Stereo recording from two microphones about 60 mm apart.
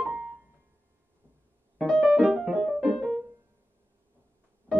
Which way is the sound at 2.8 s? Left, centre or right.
Centre.